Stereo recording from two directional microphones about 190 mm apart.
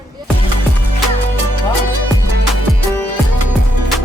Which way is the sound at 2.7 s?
Centre (ahead or behind).